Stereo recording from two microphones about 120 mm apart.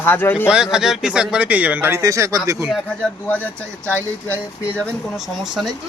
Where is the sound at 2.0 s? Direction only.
25° right (ahead or behind).